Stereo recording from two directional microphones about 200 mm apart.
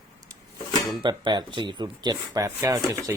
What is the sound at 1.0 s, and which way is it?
Speech, 25° right (ahead or behind).